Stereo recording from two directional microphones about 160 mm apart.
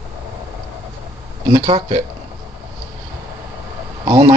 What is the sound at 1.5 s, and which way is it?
Speech, 30° right (ahead or behind).